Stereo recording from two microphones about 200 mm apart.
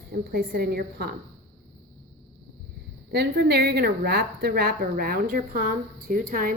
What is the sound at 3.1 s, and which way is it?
A woman's voice, 55° right (ahead or behind).